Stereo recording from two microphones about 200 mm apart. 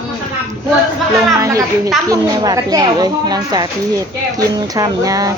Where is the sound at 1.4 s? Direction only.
15° right (ahead or behind).